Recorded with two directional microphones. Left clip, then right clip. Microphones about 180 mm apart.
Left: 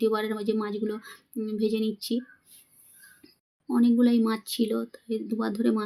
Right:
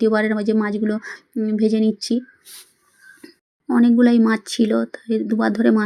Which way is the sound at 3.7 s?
20° right (ahead or behind).